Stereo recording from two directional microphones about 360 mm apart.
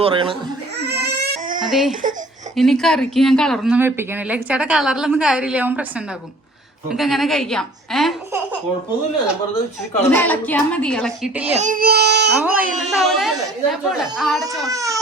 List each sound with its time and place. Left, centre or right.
0.0 s speech: centre
0.8 s baby cry: right
1.7 s speech: centre
6.9 s speech: centre
10.1 s speech: centre
11.4 s a child's voice: centre
12.4 s speech: centre